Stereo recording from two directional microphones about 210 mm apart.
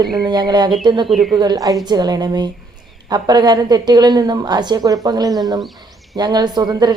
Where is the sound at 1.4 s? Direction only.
20° right (ahead or behind).